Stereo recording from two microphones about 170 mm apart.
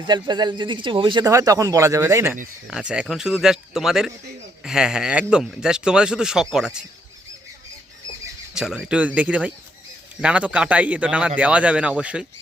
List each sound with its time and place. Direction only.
0.0 s speech: 25° right (ahead or behind)
2.6 s speech: 5° right (ahead or behind)
8.5 s a man's voice: centre (ahead or behind)